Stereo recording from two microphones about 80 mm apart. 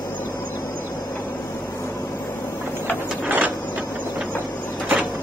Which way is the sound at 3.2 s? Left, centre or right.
Right.